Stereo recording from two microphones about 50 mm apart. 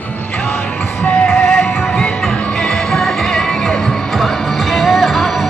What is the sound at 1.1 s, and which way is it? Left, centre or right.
Music, centre.